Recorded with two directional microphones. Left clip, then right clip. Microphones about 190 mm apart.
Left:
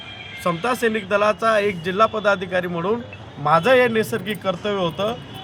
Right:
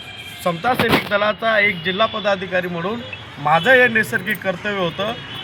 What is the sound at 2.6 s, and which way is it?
Speech, 30° left (ahead or behind).